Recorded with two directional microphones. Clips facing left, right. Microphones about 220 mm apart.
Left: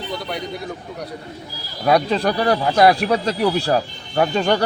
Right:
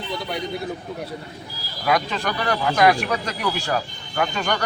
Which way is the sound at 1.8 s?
30° left (ahead or behind).